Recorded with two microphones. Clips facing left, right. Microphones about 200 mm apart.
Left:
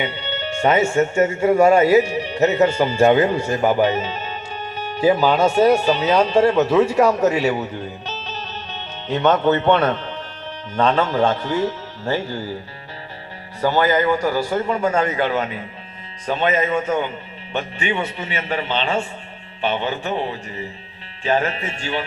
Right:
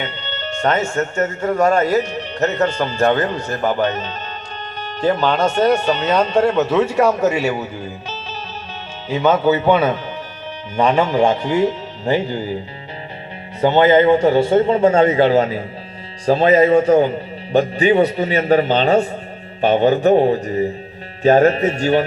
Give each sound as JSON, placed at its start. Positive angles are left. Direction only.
{"t": 0.0, "sound": "speech", "side_deg": 10}
{"t": 13.6, "sound": "a man's voice", "side_deg": -20}